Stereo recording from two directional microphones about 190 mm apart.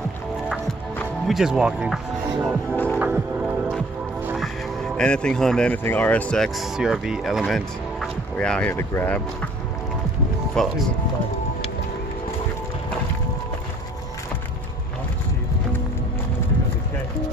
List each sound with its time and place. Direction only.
0.9 s speech: centre (ahead or behind)
2.7 s music: 10° left (ahead or behind)
3.0 s music: 10° right (ahead or behind)
4.4 s speech: 5° left (ahead or behind)
10.6 s speech: 5° left (ahead or behind)